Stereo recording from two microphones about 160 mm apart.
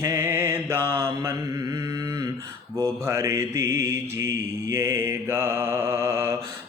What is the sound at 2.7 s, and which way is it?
Mantra, 15° right (ahead or behind).